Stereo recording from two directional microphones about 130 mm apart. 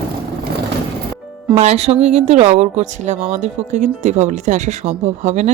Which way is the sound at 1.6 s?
55° right (ahead or behind).